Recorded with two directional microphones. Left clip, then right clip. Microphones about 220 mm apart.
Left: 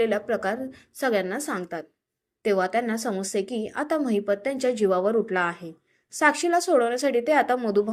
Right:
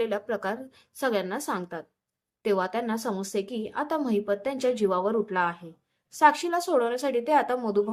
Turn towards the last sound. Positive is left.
turn(degrees=5)  # may be behind; listen again after turning